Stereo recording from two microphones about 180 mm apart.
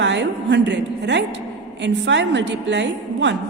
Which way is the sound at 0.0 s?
80° right.